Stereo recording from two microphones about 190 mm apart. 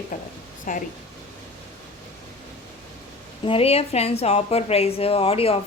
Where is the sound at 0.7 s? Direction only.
45° left (ahead or behind).